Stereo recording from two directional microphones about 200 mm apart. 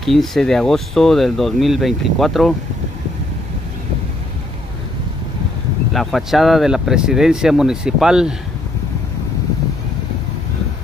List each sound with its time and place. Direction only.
0.0 s speech: centre (ahead or behind)
5.9 s speech: centre (ahead or behind)